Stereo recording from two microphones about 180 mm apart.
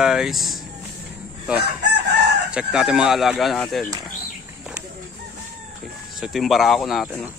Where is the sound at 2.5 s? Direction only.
5° right (ahead or behind).